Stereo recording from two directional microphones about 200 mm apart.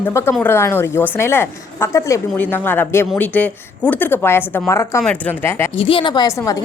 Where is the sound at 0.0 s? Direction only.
10° left (ahead or behind).